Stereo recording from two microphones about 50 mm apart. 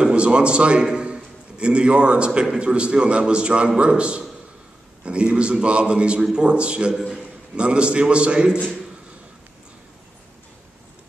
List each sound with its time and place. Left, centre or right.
0.0 s a man's voice: right